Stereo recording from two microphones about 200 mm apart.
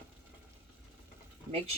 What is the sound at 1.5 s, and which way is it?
Speech, 30° right (ahead or behind).